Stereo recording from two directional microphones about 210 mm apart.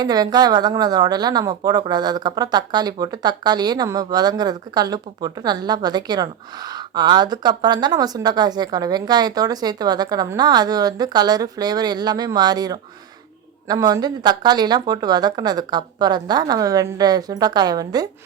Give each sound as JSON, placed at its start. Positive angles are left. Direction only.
{"t": 0.0, "sound": "speech", "side_deg": -20}